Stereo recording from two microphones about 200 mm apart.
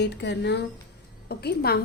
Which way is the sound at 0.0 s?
60° left (ahead or behind).